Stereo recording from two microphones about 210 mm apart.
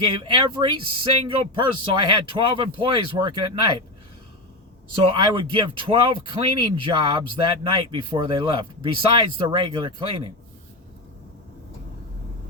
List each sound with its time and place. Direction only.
0.0 s speech: 25° right (ahead or behind)
5.2 s speech: 25° right (ahead or behind)